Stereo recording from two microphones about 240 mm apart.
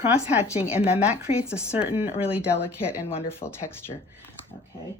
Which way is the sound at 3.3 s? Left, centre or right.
Centre.